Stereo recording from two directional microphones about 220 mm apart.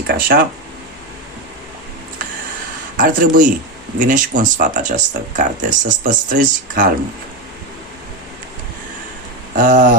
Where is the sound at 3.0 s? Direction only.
35° right (ahead or behind).